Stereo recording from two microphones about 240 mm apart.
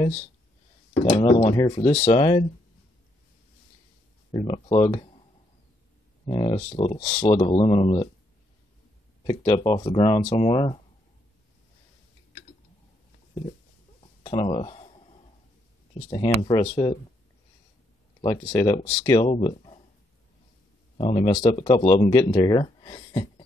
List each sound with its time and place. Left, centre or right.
1.1 s speech: left
4.3 s speech: centre
6.2 s speech: left
7.0 s speech: left
9.2 s speech: centre
14.2 s speech: left
16.1 s speech: centre
18.2 s speech: centre
21.0 s speech: left